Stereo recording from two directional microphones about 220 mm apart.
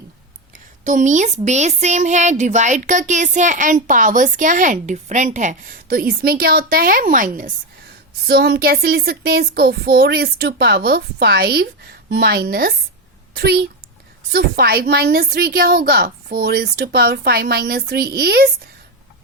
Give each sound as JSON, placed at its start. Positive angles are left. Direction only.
{"t": 0.5, "sound": "speech", "side_deg": -35}